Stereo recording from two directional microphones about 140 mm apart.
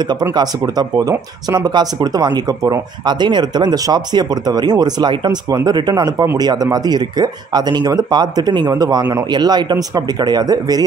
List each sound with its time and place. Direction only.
0.0 s speech: 30° right (ahead or behind)